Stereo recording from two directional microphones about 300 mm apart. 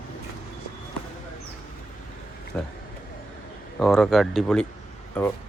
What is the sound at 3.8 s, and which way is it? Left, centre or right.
Speech, centre.